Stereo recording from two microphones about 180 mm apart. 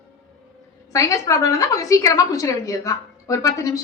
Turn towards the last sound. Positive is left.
turn(degrees=20)  # may be behind; listen again after turning